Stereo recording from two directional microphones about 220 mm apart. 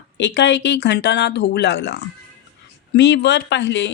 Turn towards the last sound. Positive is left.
turn(degrees=55)  # may be behind; listen again after turning